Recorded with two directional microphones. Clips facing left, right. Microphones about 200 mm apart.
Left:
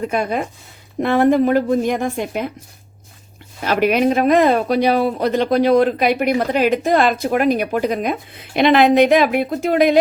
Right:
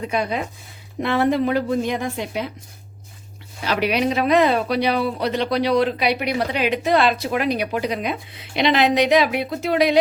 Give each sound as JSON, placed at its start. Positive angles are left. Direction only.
{"t": 0.0, "sound": "speech", "side_deg": 50}
{"t": 3.6, "sound": "speech", "side_deg": 50}